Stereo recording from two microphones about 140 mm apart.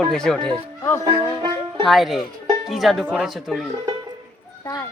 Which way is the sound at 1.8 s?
Centre (ahead or behind).